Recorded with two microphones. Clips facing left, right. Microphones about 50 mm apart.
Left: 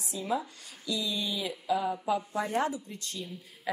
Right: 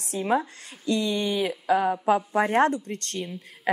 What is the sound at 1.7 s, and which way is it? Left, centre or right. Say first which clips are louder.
Speech: right 7 dB; right.